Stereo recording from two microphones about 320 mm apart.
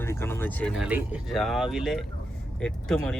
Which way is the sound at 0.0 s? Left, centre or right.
Centre.